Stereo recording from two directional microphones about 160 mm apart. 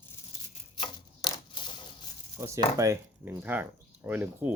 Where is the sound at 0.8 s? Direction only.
30° left (ahead or behind).